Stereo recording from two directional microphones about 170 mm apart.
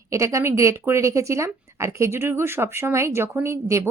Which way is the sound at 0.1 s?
15° right (ahead or behind).